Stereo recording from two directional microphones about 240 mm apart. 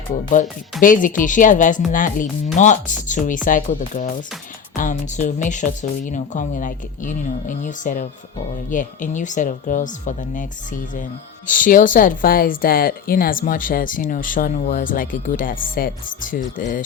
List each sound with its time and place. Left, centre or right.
0.8 s speech: left